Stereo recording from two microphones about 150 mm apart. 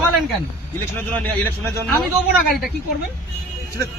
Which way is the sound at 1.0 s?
15° left (ahead or behind).